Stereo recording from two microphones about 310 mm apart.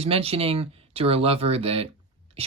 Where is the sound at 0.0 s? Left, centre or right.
Centre.